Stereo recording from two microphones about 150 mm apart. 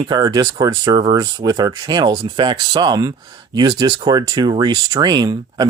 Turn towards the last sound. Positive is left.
turn(degrees=-30)  # may be behind; listen again after turning